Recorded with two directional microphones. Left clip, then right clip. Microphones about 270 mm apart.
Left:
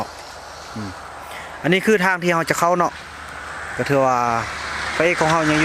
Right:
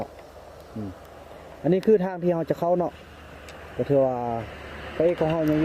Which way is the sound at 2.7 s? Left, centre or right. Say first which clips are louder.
Left 6 dB; left.